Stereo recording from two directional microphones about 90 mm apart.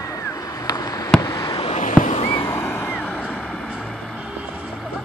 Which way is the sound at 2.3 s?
90° left.